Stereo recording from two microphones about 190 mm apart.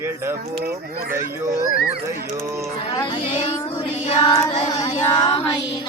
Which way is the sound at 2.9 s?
20° left (ahead or behind).